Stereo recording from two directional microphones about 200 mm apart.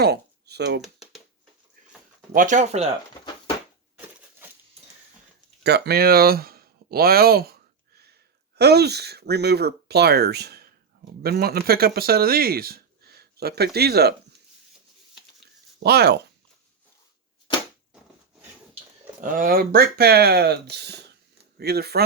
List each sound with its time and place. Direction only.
0.0 s a sound: 55° right (ahead or behind)
2.3 s speech: 40° right (ahead or behind)
5.6 s speech: 55° right (ahead or behind)
15.8 s speech: 55° right (ahead or behind)
19.2 s speech: 45° right (ahead or behind)